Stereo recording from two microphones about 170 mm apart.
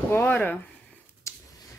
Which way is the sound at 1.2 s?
15° left (ahead or behind).